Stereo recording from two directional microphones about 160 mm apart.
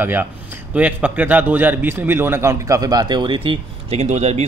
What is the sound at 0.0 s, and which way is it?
A man's voice, 10° right (ahead or behind).